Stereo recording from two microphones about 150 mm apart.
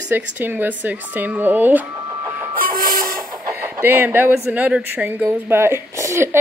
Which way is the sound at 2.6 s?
70° right (ahead or behind).